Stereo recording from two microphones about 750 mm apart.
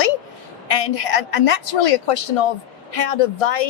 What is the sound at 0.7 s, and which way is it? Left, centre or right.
A woman's voice, left.